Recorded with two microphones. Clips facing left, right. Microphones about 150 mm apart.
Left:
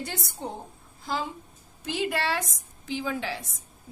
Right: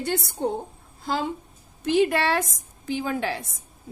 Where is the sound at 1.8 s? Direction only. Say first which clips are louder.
Right 7 dB; 60° right (ahead or behind).